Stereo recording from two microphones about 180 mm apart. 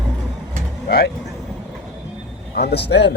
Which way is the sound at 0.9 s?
60° left (ahead or behind).